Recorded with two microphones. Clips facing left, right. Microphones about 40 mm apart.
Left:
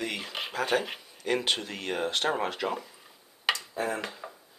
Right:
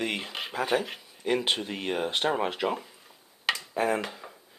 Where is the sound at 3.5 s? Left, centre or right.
Centre.